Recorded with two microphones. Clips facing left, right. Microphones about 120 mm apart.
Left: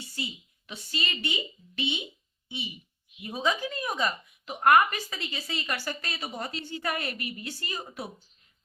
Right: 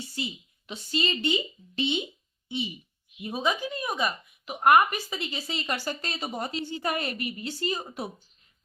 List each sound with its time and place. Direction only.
0.7 s speech: 25° right (ahead or behind)
3.2 s speech: 20° right (ahead or behind)